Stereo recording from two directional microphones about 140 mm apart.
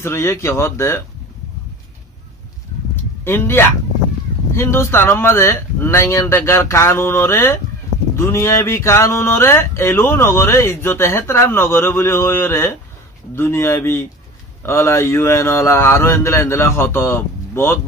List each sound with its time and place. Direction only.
0.0 s speech: 20° left (ahead or behind)
3.3 s speech: 15° left (ahead or behind)